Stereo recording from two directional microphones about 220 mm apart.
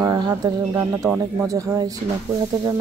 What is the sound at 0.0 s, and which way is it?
Speech, 15° right (ahead or behind).